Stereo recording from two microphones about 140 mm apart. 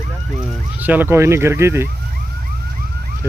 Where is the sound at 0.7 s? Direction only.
10° right (ahead or behind).